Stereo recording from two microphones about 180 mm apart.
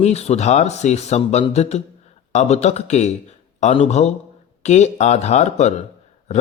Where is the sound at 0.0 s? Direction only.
35° left (ahead or behind).